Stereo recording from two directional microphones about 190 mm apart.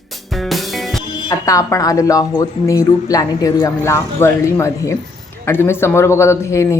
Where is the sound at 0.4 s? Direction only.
Centre (ahead or behind).